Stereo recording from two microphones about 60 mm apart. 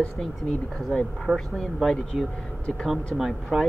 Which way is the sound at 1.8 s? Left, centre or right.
Centre.